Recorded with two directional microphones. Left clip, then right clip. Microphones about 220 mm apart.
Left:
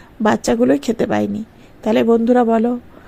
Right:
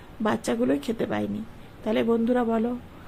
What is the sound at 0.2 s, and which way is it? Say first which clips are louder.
Speech: left 10 dB; 30° left (ahead or behind).